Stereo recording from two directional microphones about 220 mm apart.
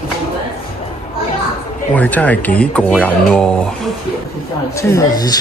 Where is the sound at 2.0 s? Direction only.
5° left (ahead or behind).